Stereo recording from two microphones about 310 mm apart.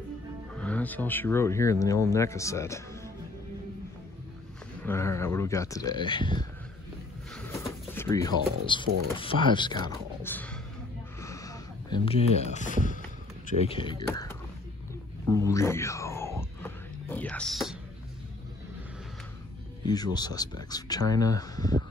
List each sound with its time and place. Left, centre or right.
0.6 s speech: centre
4.8 s speech: centre
7.3 s a sound: centre
8.7 s speech: centre
11.1 s a sound: centre
13.6 s speech: centre
15.2 s music: centre
19.8 s speech: centre